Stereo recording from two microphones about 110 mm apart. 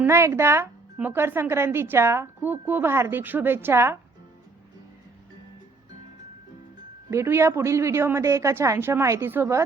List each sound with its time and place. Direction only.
0.0 s speech: 25° right (ahead or behind)
7.1 s speech: 25° right (ahead or behind)